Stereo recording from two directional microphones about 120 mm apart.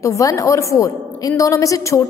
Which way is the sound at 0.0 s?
25° left (ahead or behind).